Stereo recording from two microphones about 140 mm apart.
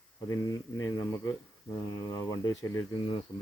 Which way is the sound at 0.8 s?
20° left (ahead or behind).